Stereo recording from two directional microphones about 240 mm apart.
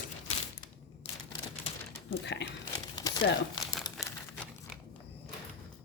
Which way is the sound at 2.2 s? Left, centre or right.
Left.